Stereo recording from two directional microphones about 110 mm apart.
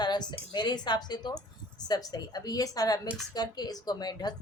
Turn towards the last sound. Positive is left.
turn(degrees=40)  # may be behind; listen again after turning